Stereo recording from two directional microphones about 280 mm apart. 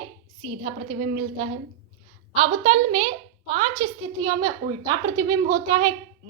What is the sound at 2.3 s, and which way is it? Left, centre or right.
A child's voice, centre.